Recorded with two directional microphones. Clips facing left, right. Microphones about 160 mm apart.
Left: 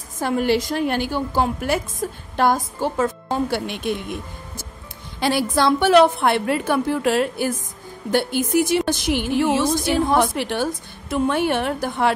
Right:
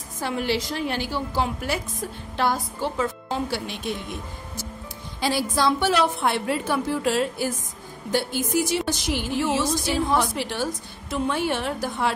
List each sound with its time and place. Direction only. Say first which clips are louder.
0.2 s a woman's voice: left 6 dB; 50° left (ahead or behind)
5.2 s speech: left 4 dB; 60° left (ahead or behind)